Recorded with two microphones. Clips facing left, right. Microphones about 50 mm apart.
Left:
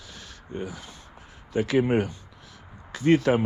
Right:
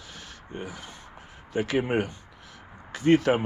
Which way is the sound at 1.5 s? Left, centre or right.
Right.